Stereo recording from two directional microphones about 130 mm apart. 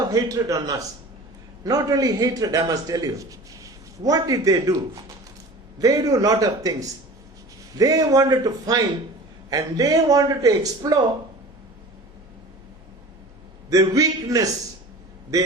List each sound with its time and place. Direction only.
0.1 s a man's voice: 25° right (ahead or behind)
5.8 s a man's voice: 30° right (ahead or behind)
13.7 s a man's voice: 25° right (ahead or behind)